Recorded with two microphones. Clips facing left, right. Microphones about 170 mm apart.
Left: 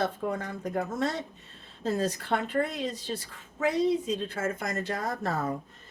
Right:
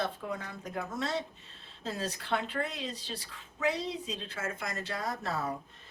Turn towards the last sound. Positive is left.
turn(degrees=50)  # may be behind; listen again after turning